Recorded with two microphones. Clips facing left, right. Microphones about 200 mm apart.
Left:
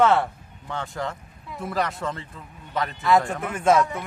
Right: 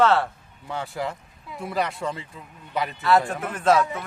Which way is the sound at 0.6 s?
10° right (ahead or behind).